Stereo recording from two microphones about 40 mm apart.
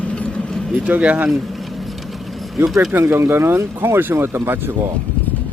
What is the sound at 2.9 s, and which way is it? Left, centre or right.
Speech, right.